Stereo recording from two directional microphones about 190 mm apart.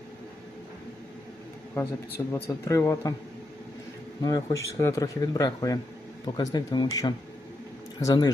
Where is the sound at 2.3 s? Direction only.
15° left (ahead or behind).